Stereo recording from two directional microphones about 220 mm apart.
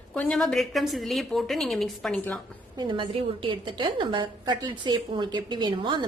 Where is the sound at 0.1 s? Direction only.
5° left (ahead or behind).